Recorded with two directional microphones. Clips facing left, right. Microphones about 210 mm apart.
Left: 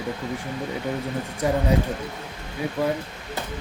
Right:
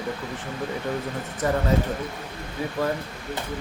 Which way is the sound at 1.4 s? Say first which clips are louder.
Left 1 dB; 10° left (ahead or behind).